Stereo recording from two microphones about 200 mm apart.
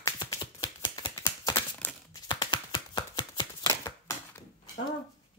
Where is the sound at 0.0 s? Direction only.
20° left (ahead or behind).